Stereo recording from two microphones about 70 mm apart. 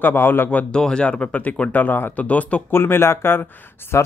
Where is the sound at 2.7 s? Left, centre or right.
Left.